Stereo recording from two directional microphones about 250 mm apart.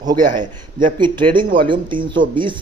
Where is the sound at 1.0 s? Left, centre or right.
Centre.